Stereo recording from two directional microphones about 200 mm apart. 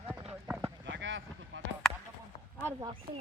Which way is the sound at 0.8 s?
65° right (ahead or behind).